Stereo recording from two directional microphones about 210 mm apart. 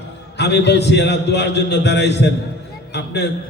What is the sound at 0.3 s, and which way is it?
A man's voice, 55° left (ahead or behind).